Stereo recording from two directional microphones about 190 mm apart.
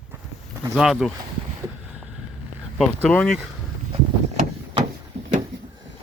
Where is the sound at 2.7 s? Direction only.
5° left (ahead or behind).